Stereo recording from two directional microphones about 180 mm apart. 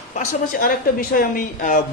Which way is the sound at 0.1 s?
45° left (ahead or behind).